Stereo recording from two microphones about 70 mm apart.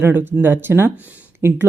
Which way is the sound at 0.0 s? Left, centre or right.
Right.